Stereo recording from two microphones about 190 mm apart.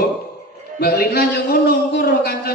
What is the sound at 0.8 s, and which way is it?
Mantra, 55° left (ahead or behind).